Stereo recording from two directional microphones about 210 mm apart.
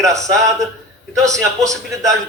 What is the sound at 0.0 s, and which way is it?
Speech, 15° right (ahead or behind).